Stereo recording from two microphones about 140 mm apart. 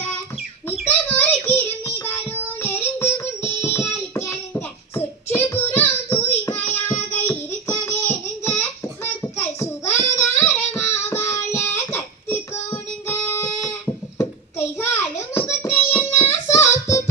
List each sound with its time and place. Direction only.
0.9 s child singing: 15° left (ahead or behind)
13.4 s a sound: 25° left (ahead or behind)
14.8 s child singing: 20° left (ahead or behind)